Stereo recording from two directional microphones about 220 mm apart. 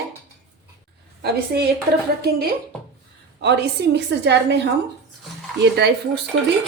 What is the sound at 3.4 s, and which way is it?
A woman's voice, 50° right (ahead or behind).